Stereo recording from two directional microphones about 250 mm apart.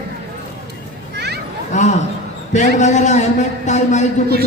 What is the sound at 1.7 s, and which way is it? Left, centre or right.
A man's voice, left.